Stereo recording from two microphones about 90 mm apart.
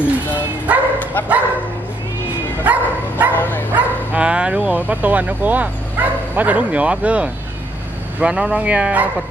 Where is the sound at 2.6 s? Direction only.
20° right (ahead or behind).